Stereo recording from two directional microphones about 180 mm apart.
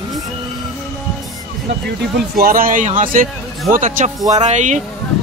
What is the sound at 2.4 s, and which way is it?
Speech, 50° right (ahead or behind).